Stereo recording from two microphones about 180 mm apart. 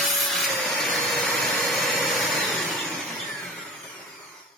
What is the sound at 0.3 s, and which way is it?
Vacuum cleaner, 5° left (ahead or behind).